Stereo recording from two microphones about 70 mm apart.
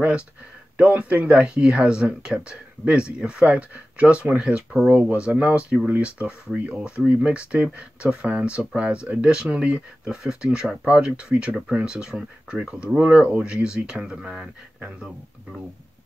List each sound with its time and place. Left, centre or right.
0.7 s speech: right